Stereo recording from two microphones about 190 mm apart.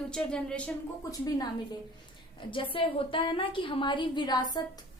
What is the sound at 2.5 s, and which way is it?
A woman's voice, 25° left (ahead or behind).